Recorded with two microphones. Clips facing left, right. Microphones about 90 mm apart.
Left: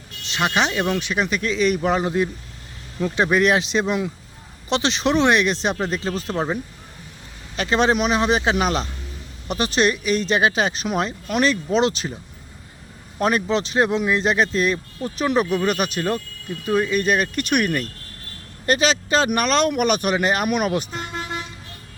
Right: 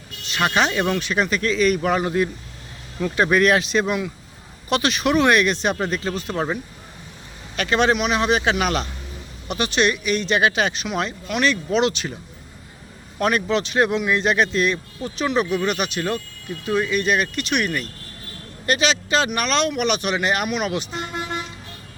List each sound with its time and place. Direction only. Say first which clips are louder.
0.3 s speech: right 1 dB; 20° left (ahead or behind)
6.3 s speech: even; 5° left (ahead or behind)
7.5 s speech: even; 25° left (ahead or behind)
13.1 s speech: even; 30° left (ahead or behind); by 20.8 s 45° left (ahead or behind)